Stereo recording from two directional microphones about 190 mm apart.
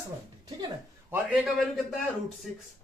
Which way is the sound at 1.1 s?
10° right (ahead or behind).